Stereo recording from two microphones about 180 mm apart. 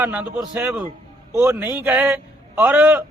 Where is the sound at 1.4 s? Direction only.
15° right (ahead or behind).